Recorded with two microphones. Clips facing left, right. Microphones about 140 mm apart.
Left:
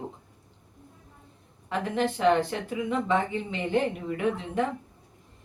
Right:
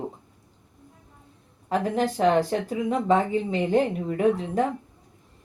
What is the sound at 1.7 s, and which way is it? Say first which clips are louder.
Speech: right 3 dB; 40° right (ahead or behind).